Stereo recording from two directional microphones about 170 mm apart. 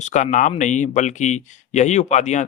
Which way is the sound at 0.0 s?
45° left (ahead or behind).